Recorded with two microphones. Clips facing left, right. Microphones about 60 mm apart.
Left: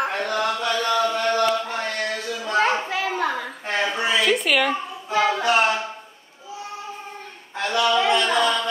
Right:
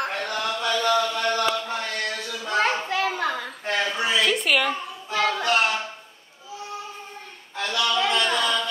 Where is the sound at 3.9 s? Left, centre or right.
Left.